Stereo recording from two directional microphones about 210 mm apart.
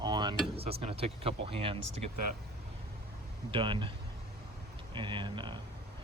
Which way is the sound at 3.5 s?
25° right (ahead or behind).